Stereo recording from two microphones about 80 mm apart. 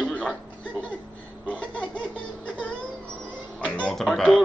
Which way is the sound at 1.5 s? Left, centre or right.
Centre.